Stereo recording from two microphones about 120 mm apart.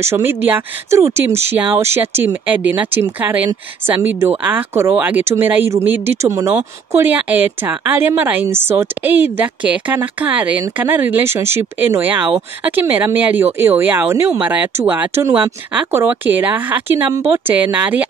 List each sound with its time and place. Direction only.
0.0 s speech: 20° right (ahead or behind)